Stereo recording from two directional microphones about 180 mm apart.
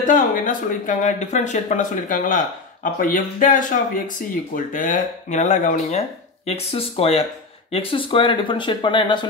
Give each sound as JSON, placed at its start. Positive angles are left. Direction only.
{"t": 0.0, "sound": "speech", "side_deg": 45}